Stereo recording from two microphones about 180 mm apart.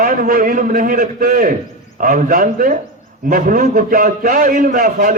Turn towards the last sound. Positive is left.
turn(degrees=-50)  # may be behind; listen again after turning